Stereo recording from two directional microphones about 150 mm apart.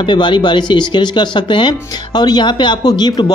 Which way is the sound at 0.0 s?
30° left (ahead or behind).